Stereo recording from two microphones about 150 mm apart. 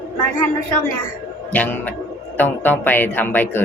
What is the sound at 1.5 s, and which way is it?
Speech, 10° left (ahead or behind).